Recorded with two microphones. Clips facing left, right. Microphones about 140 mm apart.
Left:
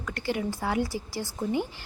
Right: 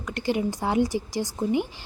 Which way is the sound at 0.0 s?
20° right (ahead or behind).